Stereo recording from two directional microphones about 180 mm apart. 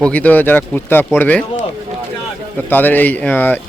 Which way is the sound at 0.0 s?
10° left (ahead or behind).